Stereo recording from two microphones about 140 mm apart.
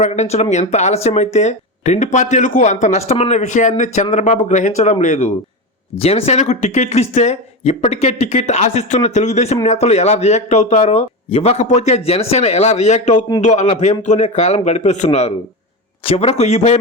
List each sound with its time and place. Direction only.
0.0 s speech: 50° left (ahead or behind)
6.0 s speech: 45° left (ahead or behind)